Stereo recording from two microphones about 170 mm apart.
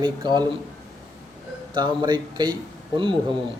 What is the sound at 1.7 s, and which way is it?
Speech, 25° right (ahead or behind).